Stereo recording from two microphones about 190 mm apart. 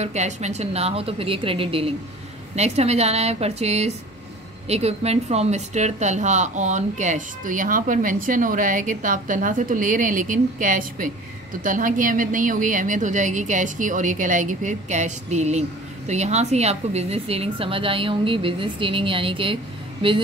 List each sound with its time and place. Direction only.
0.0 s a woman's voice: 35° right (ahead or behind)